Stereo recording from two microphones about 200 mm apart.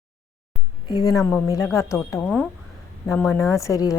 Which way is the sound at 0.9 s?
15° left (ahead or behind).